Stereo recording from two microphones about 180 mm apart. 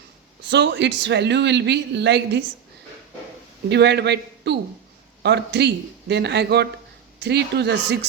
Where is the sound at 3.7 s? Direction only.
70° right (ahead or behind).